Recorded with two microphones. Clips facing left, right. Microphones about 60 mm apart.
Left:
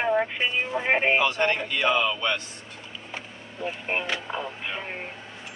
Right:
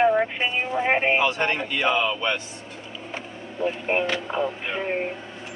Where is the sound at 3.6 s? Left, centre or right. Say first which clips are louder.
Right 6 dB; centre.